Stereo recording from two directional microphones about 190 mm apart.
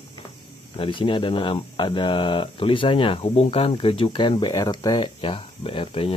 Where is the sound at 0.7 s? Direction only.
25° left (ahead or behind).